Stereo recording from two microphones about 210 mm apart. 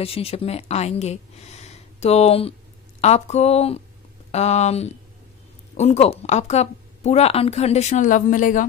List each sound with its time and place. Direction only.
0.0 s speech: 30° left (ahead or behind)